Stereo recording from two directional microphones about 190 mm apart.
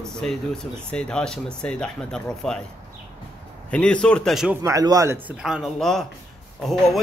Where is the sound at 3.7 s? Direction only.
5° left (ahead or behind).